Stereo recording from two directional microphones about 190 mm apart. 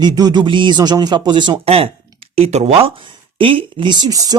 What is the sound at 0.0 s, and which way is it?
Speech, 20° right (ahead or behind).